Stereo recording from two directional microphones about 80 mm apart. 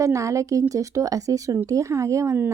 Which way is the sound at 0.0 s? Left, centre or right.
Right.